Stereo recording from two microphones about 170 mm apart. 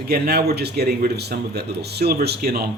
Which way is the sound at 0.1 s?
70° right (ahead or behind).